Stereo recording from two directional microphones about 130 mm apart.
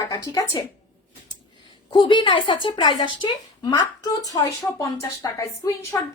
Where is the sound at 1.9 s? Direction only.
35° left (ahead or behind).